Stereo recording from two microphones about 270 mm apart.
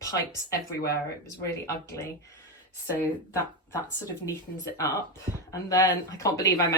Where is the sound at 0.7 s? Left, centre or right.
Left.